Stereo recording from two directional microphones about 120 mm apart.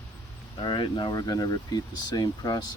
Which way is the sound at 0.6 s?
40° left (ahead or behind).